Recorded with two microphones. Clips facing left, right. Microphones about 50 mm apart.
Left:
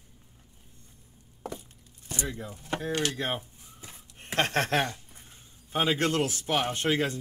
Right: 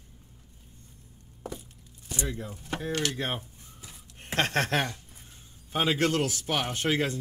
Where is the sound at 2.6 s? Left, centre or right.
Left.